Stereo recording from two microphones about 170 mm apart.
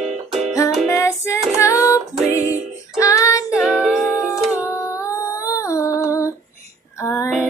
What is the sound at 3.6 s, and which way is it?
Music, 5° right (ahead or behind).